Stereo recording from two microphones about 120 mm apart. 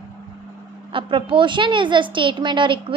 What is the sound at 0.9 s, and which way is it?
A child's voice, 45° right (ahead or behind).